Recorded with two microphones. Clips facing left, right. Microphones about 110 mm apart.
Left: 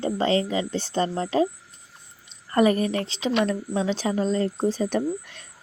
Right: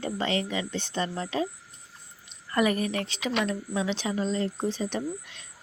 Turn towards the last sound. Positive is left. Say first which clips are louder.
# left 6 dB
turn(degrees=50)  # may be behind; listen again after turning